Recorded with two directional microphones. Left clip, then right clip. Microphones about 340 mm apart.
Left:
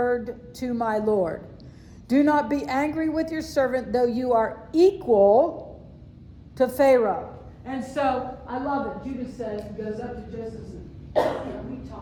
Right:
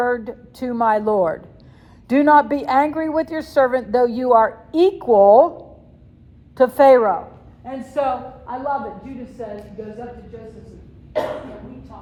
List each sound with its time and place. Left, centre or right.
0.0 s a woman's voice: centre
6.6 s a woman's voice: centre
9.4 s a sound: centre